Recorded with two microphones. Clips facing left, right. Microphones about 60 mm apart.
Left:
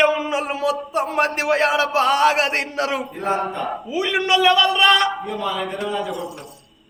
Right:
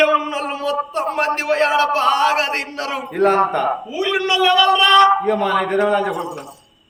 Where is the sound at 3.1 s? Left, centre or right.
Right.